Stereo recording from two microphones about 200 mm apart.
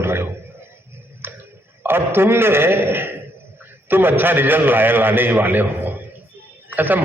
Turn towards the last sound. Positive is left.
turn(degrees=-10)  # may be behind; listen again after turning